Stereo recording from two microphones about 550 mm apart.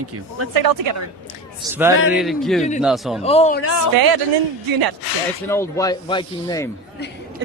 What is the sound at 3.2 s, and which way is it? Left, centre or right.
Speech, centre.